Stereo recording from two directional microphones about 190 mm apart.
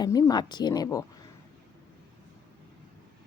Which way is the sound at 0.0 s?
20° left (ahead or behind).